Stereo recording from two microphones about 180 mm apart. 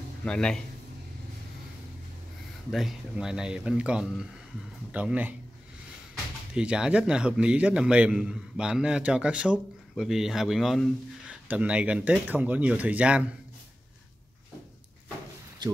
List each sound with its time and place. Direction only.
0.2 s a man's voice: 5° left (ahead or behind)
2.7 s a man's voice: centre (ahead or behind)
6.5 s a man's voice: 5° right (ahead or behind)
15.6 s speech: 25° right (ahead or behind)